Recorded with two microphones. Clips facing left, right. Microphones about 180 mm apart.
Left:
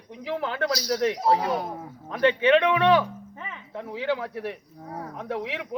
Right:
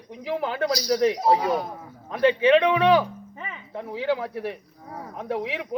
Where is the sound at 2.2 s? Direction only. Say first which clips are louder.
Right 2 dB; 5° right (ahead or behind).